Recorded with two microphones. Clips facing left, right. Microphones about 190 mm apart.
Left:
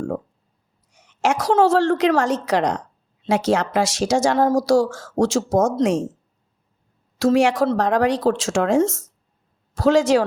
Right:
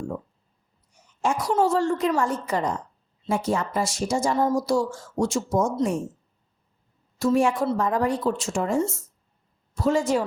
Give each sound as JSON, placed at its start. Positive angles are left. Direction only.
{"t": 0.9, "sound": "a woman's voice", "side_deg": 85}
{"t": 7.2, "sound": "a woman's voice", "side_deg": 90}